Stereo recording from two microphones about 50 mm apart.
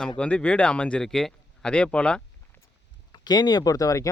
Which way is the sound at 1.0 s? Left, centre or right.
Centre.